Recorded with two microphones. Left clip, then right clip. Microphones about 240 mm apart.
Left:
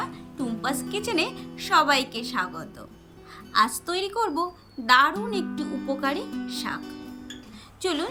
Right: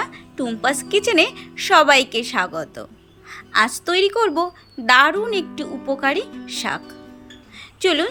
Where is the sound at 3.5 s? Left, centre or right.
Centre.